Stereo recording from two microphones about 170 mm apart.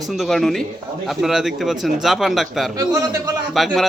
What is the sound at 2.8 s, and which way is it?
Speech, 20° right (ahead or behind).